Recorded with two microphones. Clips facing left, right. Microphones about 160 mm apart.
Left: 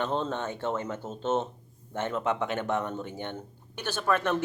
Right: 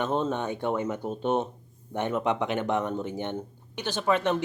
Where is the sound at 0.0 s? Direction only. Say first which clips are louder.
Right 3 dB; 10° right (ahead or behind).